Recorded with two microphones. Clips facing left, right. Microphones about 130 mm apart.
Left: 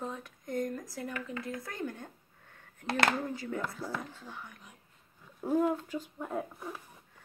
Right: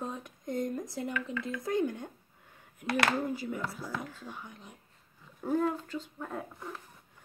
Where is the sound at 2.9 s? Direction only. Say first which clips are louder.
Even; 25° left (ahead or behind).